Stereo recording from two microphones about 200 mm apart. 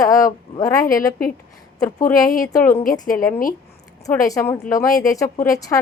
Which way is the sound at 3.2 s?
45° left (ahead or behind).